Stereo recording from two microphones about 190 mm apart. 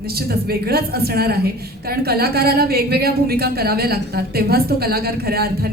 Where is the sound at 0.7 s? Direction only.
55° right (ahead or behind).